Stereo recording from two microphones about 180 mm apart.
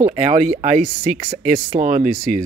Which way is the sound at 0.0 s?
35° right (ahead or behind).